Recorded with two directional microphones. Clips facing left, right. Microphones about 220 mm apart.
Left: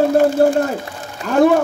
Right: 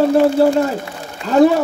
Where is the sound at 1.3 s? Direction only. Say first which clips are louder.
Right 1 dB; 50° left (ahead or behind).